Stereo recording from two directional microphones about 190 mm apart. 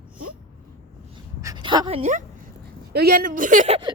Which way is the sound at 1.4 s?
25° right (ahead or behind).